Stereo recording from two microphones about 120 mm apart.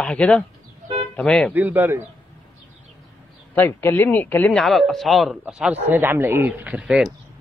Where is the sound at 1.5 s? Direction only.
15° right (ahead or behind).